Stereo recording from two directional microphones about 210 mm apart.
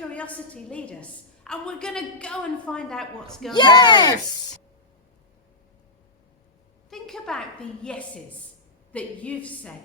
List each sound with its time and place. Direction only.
0.1 s a woman's voice: 5° left (ahead or behind)
3.5 s speech: 20° left (ahead or behind)
6.9 s a woman's voice: centre (ahead or behind)